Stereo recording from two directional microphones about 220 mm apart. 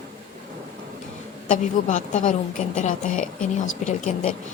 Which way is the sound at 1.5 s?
35° left (ahead or behind).